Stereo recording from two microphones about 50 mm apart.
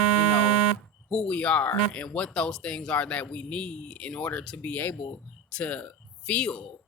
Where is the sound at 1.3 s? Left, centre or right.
Left.